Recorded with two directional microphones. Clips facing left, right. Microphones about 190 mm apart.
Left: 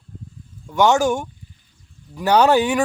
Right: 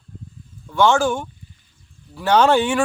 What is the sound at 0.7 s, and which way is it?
Speech, 15° left (ahead or behind).